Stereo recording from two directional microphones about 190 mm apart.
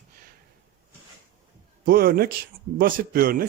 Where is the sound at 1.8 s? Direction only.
50° right (ahead or behind).